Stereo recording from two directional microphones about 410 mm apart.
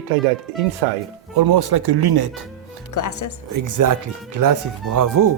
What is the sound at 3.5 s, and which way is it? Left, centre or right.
Speech, right.